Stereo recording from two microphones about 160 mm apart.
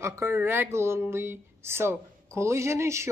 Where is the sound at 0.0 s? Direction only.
15° right (ahead or behind).